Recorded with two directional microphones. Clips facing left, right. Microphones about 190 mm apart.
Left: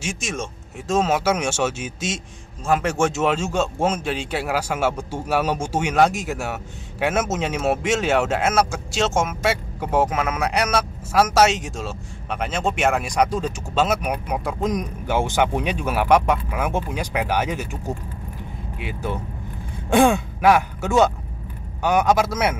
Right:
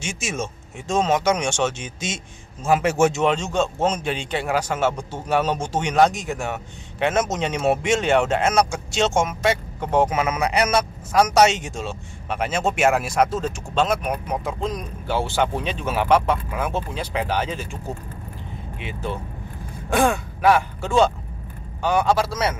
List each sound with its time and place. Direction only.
0.0 s a man's voice: centre (ahead or behind)
20.4 s speech: 10° left (ahead or behind)